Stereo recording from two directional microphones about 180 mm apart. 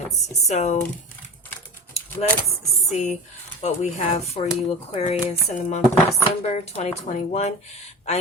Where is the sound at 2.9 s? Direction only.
40° left (ahead or behind).